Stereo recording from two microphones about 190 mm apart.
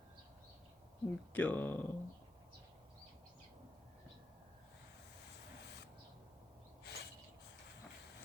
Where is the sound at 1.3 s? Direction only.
10° left (ahead or behind).